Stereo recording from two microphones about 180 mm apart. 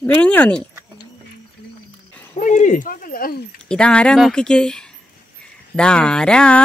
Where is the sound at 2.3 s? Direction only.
40° left (ahead or behind).